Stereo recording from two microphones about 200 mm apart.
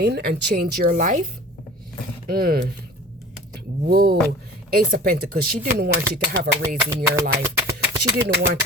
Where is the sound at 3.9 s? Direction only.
50° right (ahead or behind).